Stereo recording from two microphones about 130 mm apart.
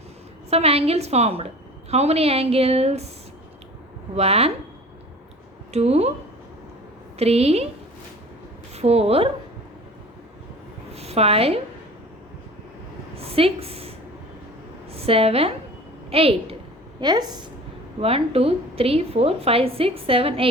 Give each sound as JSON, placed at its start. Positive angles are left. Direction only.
{"t": 0.5, "sound": "a woman's voice", "side_deg": -50}
{"t": 4.1, "sound": "a woman's voice", "side_deg": -55}
{"t": 5.7, "sound": "a woman's voice", "side_deg": -55}
{"t": 7.2, "sound": "a woman's voice", "side_deg": -55}
{"t": 8.7, "sound": "a woman's voice", "side_deg": -55}
{"t": 10.9, "sound": "a woman's voice", "side_deg": -50}
{"t": 13.1, "sound": "a woman's voice", "side_deg": -50}
{"t": 15.0, "sound": "a woman's voice", "side_deg": -50}
{"t": 17.0, "sound": "a woman's voice", "side_deg": -35}
{"t": 18.0, "sound": "a woman's voice", "side_deg": -50}